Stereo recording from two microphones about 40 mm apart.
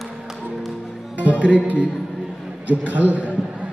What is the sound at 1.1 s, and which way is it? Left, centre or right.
Music, right.